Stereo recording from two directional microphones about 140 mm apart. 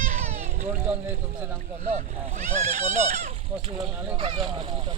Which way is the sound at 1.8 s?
55° right (ahead or behind).